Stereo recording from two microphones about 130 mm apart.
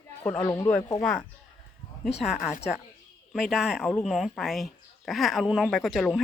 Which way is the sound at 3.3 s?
Centre (ahead or behind).